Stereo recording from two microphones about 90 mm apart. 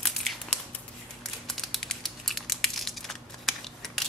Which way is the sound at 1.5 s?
Centre (ahead or behind).